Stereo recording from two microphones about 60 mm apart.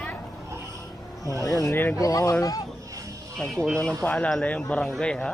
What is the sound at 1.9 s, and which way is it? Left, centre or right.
Speech, left.